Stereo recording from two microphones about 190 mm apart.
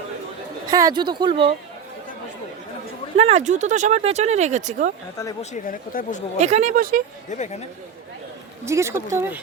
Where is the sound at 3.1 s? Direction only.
35° right (ahead or behind).